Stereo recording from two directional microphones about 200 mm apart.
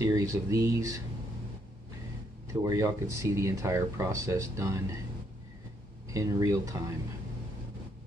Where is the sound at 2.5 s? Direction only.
15° right (ahead or behind).